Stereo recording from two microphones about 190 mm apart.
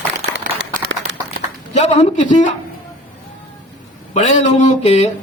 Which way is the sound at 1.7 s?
35° left (ahead or behind).